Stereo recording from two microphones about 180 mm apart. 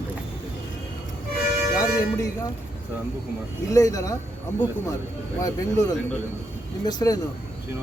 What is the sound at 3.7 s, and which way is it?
Speech, 20° left (ahead or behind).